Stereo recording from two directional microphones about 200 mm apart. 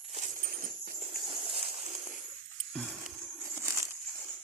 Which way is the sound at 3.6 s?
15° right (ahead or behind).